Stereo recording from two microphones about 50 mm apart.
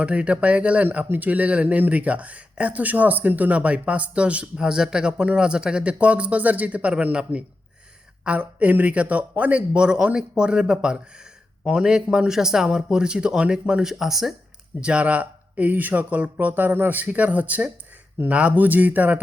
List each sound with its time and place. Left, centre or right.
0.0 s speech: right
4.5 s speech: centre
8.4 s speech: right; by 14.3 s centre
14.8 s speech: right
17.0 s speech: right